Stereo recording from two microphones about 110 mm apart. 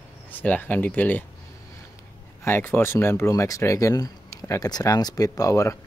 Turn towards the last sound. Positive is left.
turn(degrees=30)  # may be behind; listen again after turning